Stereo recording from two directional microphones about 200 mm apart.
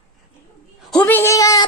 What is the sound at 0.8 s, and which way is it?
Speech, 5° left (ahead or behind).